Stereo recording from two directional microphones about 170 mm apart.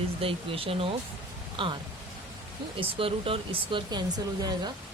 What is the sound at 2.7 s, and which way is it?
Speech, 30° right (ahead or behind).